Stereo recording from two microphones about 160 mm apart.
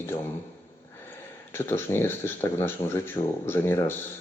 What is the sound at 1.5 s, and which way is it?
Speech, 15° left (ahead or behind).